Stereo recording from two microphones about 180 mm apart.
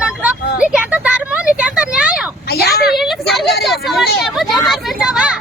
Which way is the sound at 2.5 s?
60° left (ahead or behind).